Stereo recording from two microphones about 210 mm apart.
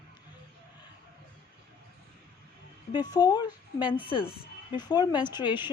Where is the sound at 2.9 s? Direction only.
20° left (ahead or behind).